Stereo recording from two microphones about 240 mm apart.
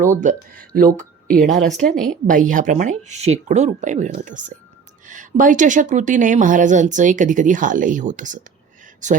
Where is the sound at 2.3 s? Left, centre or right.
Right.